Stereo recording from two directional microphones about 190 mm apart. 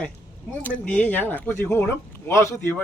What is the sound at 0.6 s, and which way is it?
Speech, 10° left (ahead or behind).